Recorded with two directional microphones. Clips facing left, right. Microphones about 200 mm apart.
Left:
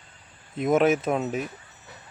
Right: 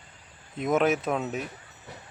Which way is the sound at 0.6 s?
Centre (ahead or behind).